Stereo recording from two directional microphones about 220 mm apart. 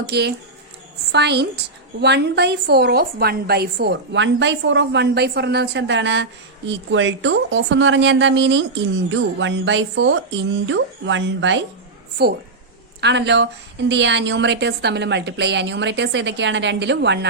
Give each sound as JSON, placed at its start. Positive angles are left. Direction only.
{"t": 0.1, "sound": "a woman's voice", "side_deg": -50}
{"t": 13.0, "sound": "a woman's voice", "side_deg": -50}